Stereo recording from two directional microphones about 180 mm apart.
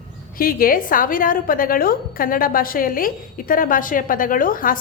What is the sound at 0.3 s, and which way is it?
A woman's voice, 55° left (ahead or behind).